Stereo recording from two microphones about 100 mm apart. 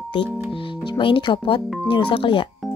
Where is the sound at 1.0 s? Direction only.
55° left (ahead or behind).